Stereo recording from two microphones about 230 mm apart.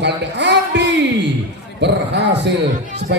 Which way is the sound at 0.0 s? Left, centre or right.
Right.